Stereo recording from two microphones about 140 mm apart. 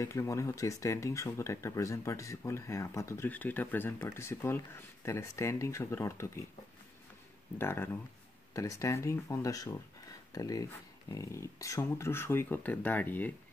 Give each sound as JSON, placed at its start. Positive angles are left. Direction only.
{"t": 0.0, "sound": "speech", "side_deg": 20}
{"t": 7.5, "sound": "speech", "side_deg": 15}